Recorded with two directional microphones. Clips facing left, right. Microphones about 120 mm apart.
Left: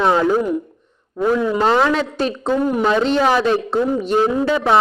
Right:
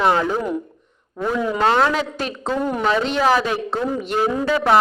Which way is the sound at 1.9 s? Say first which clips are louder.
Left 4 dB; 35° left (ahead or behind).